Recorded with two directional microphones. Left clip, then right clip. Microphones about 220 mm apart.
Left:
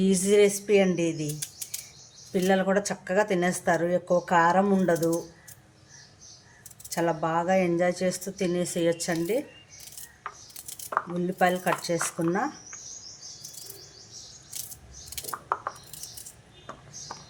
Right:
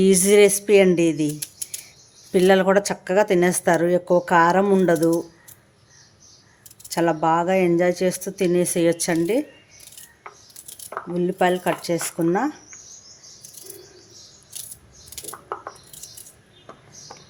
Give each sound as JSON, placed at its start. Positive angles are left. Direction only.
{"t": 0.0, "sound": "speech", "side_deg": -35}
{"t": 2.3, "sound": "speech", "side_deg": -40}
{"t": 6.9, "sound": "speech", "side_deg": -35}
{"t": 11.2, "sound": "speech", "side_deg": -30}